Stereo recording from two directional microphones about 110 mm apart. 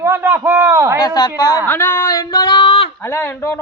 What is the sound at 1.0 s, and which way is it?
Speech, 35° left (ahead or behind).